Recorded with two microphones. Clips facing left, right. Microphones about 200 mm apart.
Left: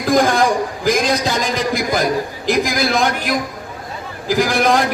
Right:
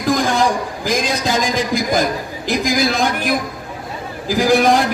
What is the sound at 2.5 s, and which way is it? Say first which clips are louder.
Speech: even; 55° left (ahead or behind).